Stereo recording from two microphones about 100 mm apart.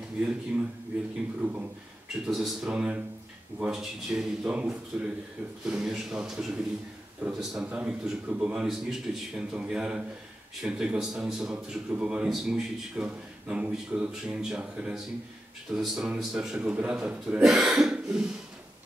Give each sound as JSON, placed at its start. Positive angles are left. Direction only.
{"t": 0.5, "sound": "a man's voice", "side_deg": -10}
{"t": 2.2, "sound": "a man's voice", "side_deg": -5}